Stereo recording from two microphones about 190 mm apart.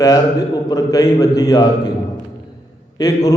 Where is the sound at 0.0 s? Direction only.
20° left (ahead or behind).